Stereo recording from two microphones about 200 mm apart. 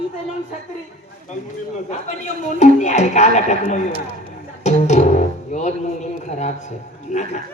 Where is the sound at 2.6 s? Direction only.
35° left (ahead or behind).